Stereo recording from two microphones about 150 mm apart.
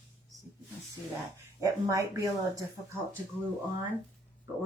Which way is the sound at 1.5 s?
20° right (ahead or behind).